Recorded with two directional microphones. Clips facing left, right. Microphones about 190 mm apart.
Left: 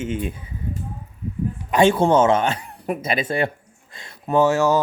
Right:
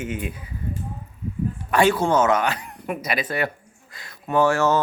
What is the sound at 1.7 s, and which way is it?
Speech, 25° left (ahead or behind).